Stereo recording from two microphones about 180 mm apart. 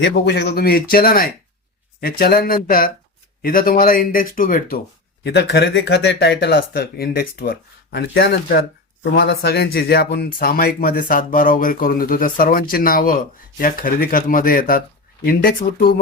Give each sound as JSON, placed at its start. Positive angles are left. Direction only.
{"t": 0.0, "sound": "speech", "side_deg": 70}
{"t": 5.2, "sound": "speech", "side_deg": 65}